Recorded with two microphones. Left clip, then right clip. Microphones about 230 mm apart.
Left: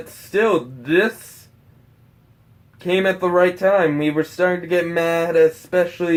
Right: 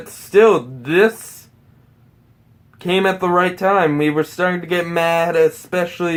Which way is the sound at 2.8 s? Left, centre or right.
Right.